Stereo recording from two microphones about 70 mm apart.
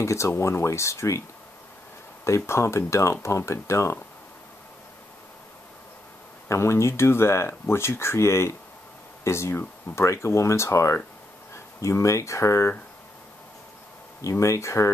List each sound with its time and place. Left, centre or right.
0.0 s speech: left
2.2 s speech: left
6.5 s speech: left
14.3 s speech: left